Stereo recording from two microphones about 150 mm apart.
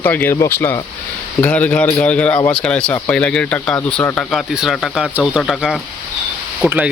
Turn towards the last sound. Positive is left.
turn(degrees=-10)  # may be behind; listen again after turning